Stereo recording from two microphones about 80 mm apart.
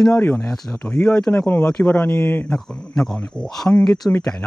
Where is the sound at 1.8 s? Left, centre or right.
Left.